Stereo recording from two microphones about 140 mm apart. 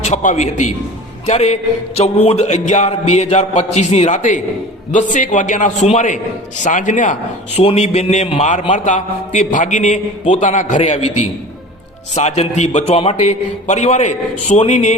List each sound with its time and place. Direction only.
0.0 s a man's voice: 60° left (ahead or behind)
7.5 s a man's voice: 45° left (ahead or behind)